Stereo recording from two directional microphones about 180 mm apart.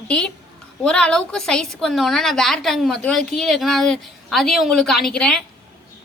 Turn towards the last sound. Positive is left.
turn(degrees=5)  # may be behind; listen again after turning